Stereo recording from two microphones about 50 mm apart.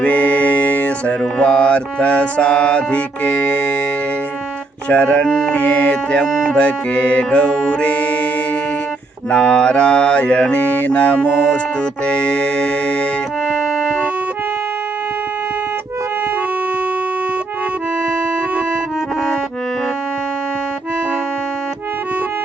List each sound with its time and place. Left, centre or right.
0.0 s music: left
4.9 s music: left
9.3 s music: left